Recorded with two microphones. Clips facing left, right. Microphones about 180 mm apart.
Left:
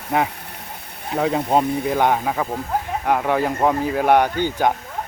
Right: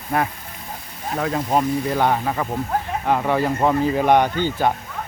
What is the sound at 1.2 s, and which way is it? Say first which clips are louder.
Speech: left 2 dB; 20° left (ahead or behind).